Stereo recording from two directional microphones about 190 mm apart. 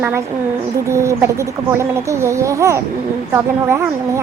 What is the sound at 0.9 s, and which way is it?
A woman's voice, 15° right (ahead or behind).